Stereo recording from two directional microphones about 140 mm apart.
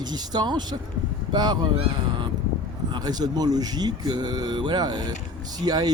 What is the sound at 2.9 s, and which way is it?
Speech, 30° right (ahead or behind).